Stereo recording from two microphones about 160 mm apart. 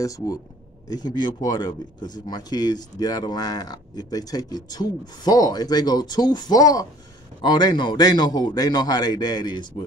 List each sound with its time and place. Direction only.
0.0 s a man's voice: 20° left (ahead or behind)